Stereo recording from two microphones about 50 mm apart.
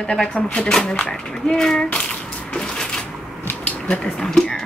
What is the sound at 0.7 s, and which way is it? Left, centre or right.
Speech, centre.